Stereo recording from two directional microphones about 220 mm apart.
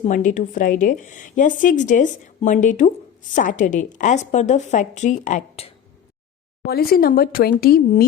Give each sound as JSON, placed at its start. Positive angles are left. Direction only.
{"t": 0.0, "sound": "a woman's voice", "side_deg": 35}
{"t": 6.7, "sound": "a woman's voice", "side_deg": 45}